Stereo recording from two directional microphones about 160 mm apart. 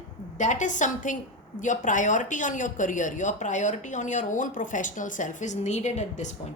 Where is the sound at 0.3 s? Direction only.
50° left (ahead or behind).